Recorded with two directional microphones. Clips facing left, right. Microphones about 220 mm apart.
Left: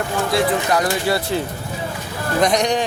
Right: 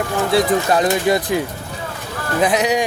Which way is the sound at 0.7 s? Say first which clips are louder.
Right 3 dB; 20° right (ahead or behind).